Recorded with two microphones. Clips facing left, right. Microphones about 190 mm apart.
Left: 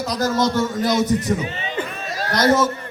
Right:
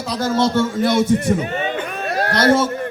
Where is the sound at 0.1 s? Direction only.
30° right (ahead or behind).